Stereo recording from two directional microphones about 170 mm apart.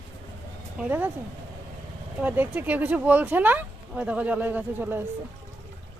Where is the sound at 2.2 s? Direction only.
10° right (ahead or behind).